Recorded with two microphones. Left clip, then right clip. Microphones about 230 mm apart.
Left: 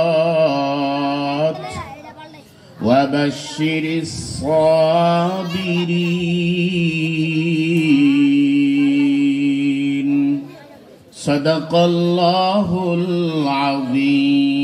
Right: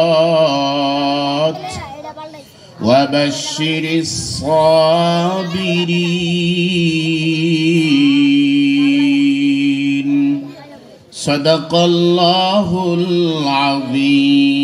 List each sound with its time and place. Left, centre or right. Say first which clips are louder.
0.0 s mantra: right 3 dB; right
2.8 s a sound: right 3 dB; right
11.2 s mantra: right 4 dB; right